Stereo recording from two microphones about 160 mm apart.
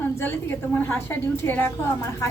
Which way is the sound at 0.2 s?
15° left (ahead or behind).